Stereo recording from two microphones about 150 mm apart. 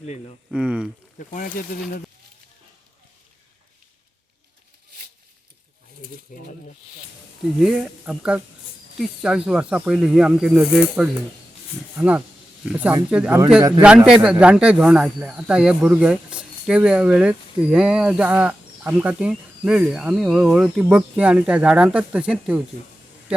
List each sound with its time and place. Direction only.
0.5 s a man's voice: 5° right (ahead or behind)
1.3 s speech: 65° left (ahead or behind)
6.3 s speech: 65° left (ahead or behind)
7.6 s a man's voice: 5° right (ahead or behind)